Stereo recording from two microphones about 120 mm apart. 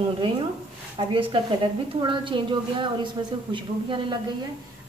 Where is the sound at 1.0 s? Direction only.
45° right (ahead or behind).